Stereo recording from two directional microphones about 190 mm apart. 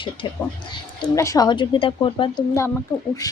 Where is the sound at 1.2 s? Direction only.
20° left (ahead or behind).